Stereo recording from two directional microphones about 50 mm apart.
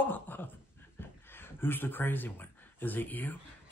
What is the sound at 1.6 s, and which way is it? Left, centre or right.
Speech, left.